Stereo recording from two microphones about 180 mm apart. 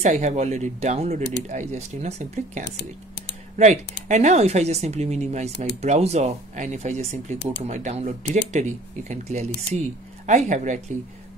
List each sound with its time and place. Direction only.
0.0 s speech: 40° right (ahead or behind)